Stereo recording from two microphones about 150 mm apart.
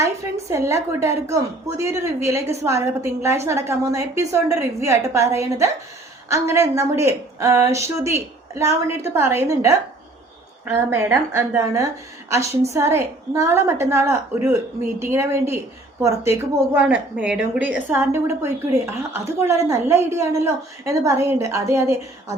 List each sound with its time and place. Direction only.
0.5 s a woman's voice: 20° right (ahead or behind)